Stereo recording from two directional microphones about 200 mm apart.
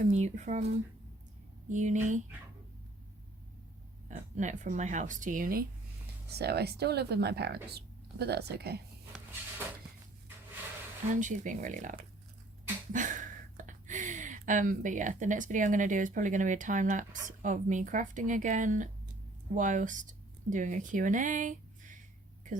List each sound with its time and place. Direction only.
0.0 s speech: 40° right (ahead or behind)
4.1 s speech: 40° right (ahead or behind); by 8.8 s 55° right (ahead or behind)
11.1 s speech: 40° right (ahead or behind)